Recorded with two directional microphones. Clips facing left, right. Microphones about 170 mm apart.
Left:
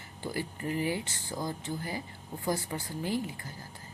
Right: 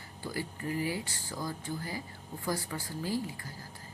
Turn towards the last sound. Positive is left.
turn(degrees=20)  # may be behind; listen again after turning